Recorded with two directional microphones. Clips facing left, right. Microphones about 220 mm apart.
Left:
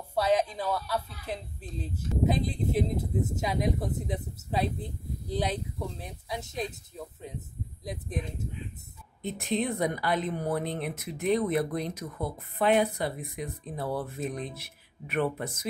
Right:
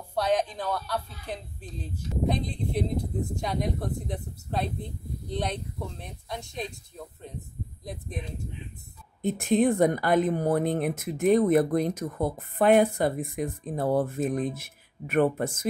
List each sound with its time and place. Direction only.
0.1 s speech: 5° left (ahead or behind)
9.2 s speech: 50° right (ahead or behind)